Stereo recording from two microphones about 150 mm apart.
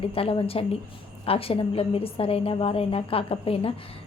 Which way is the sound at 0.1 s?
40° left (ahead or behind).